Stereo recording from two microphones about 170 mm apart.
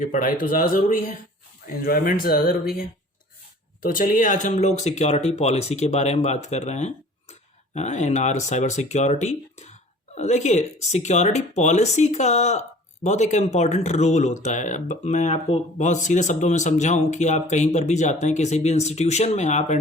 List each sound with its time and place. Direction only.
0.0 s speech: 50° left (ahead or behind)
3.8 s speech: 55° left (ahead or behind)